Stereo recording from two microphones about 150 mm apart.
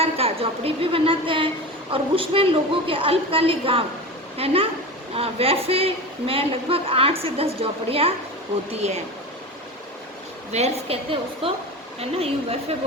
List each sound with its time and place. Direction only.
0.0 s a woman's voice: 40° right (ahead or behind)
10.5 s a man's voice: 45° right (ahead or behind)